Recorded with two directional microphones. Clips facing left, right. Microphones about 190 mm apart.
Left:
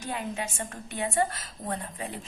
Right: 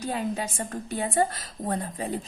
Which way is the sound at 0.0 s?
35° right (ahead or behind).